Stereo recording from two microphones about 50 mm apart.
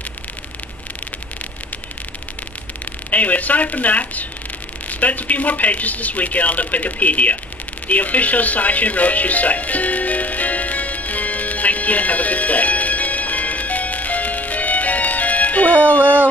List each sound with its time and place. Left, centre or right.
3.1 s speech: left
7.9 s music: left
16.0 s a sound: right